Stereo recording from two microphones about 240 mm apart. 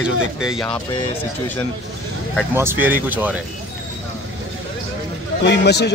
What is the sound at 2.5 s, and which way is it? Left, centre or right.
Speech, centre.